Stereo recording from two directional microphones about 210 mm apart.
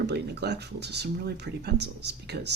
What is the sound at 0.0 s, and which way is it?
Speech, 55° right (ahead or behind).